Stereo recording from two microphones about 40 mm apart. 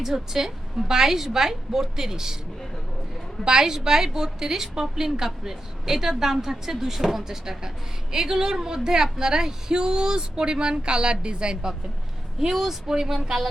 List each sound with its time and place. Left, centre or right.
0.0 s a woman's voice: centre
3.4 s a woman's voice: centre
12.4 s a woman's voice: centre